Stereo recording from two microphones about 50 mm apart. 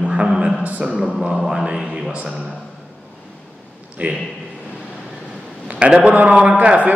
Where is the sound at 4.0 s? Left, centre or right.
Right.